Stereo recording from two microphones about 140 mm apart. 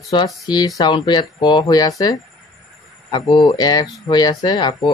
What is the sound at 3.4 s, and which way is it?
Speech, 30° left (ahead or behind).